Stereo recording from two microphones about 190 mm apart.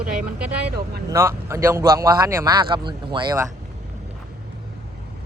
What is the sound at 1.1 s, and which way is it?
Speech, 15° right (ahead or behind).